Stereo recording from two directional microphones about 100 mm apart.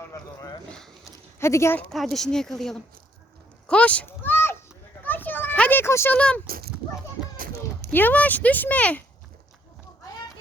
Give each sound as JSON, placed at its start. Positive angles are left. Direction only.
{"t": 0.0, "sound": "a sound", "side_deg": 30}
{"t": 1.9, "sound": "speech", "side_deg": 5}
{"t": 3.7, "sound": "a sound", "side_deg": 15}
{"t": 5.0, "sound": "children playing", "side_deg": 20}
{"t": 6.1, "sound": "speech", "side_deg": 10}
{"t": 7.9, "sound": "speech", "side_deg": 15}